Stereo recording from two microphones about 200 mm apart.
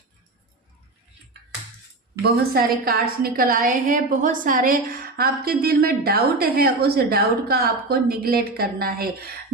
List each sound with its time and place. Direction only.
2.2 s a woman's voice: 50° right (ahead or behind)